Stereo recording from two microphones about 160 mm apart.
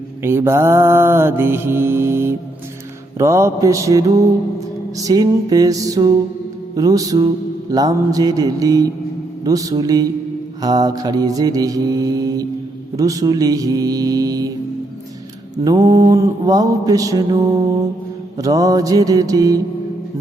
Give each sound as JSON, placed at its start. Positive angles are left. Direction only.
{"t": 0.2, "sound": "mantra", "side_deg": -15}
{"t": 15.5, "sound": "mantra", "side_deg": -25}